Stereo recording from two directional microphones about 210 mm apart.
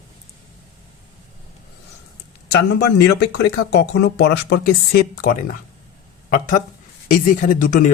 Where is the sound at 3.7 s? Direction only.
50° left (ahead or behind).